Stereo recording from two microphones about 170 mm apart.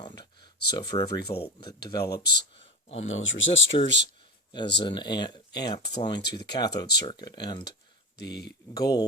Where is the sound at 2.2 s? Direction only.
80° left.